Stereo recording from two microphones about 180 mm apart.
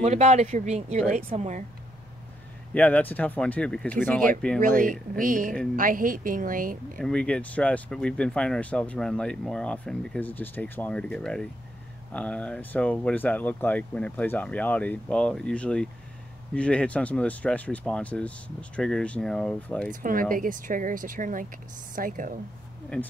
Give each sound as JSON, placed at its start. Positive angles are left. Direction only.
{"t": 0.0, "sound": "speech", "side_deg": -40}
{"t": 2.7, "sound": "speech", "side_deg": 10}
{"t": 4.6, "sound": "speech", "side_deg": -45}
{"t": 7.0, "sound": "speech", "side_deg": 5}
{"t": 19.9, "sound": "speech", "side_deg": -50}
{"t": 22.9, "sound": "speech", "side_deg": 5}